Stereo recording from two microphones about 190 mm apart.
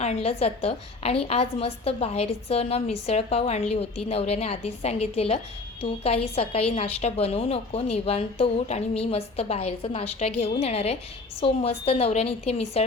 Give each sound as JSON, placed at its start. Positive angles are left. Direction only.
{"t": 0.0, "sound": "a woman's voice", "side_deg": 35}